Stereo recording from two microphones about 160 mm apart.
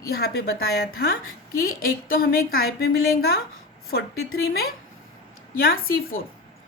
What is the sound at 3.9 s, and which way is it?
Speech, 85° left.